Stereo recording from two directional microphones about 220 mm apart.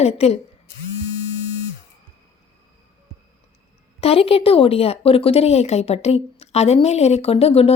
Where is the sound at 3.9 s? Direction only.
25° left (ahead or behind).